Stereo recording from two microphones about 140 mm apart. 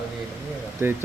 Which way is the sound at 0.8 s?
15° right (ahead or behind).